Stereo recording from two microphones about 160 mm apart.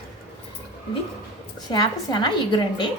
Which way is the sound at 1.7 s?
25° left (ahead or behind).